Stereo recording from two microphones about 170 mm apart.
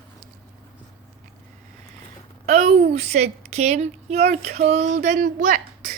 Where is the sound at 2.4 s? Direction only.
40° right (ahead or behind).